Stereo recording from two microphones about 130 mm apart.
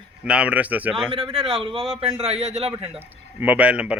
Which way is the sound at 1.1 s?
45° right (ahead or behind).